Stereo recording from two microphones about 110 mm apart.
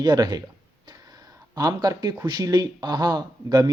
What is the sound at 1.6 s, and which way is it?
Speech, 35° right (ahead or behind).